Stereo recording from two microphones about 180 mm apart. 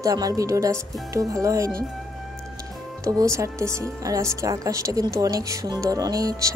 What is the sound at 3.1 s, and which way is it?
Speech, 20° right (ahead or behind).